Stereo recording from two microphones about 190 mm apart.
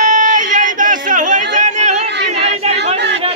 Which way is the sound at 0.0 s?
40° right (ahead or behind).